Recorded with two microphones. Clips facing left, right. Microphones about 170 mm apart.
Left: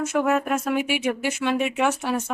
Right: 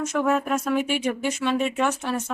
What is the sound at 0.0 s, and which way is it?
Speech, 10° left (ahead or behind).